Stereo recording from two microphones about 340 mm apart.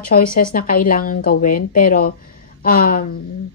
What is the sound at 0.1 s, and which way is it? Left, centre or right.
Speech, left.